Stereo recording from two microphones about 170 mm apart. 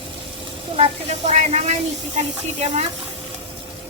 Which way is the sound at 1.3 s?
40° right (ahead or behind).